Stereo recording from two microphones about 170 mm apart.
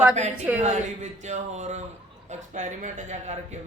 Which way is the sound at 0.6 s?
45° right (ahead or behind).